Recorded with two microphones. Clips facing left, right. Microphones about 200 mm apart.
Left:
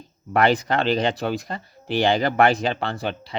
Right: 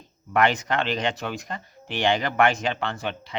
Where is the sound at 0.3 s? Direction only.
35° left (ahead or behind).